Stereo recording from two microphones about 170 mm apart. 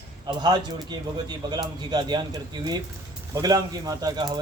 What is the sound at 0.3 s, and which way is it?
Speech, 25° right (ahead or behind).